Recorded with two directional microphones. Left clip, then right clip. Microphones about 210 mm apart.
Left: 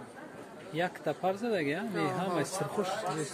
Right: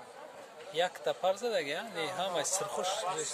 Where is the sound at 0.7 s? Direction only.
25° right (ahead or behind).